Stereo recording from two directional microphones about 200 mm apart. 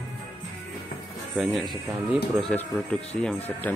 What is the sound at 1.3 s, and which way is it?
Speech, centre (ahead or behind).